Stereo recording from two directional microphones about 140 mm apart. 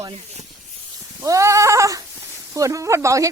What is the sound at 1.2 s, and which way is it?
Goat, 25° right (ahead or behind).